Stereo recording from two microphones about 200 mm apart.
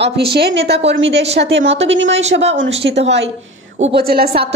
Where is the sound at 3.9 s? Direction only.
50° right (ahead or behind).